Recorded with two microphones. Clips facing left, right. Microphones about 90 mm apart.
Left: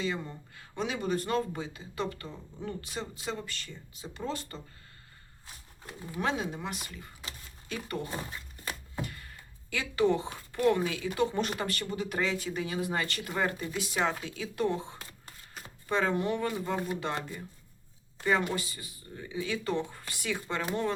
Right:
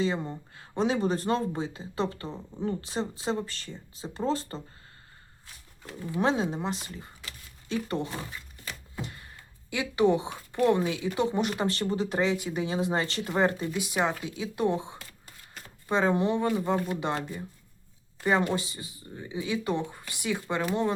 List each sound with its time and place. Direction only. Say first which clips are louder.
0.0 s speech: right 5 dB; 30° right (ahead or behind)
6.1 s speech: right 5 dB; 30° right (ahead or behind)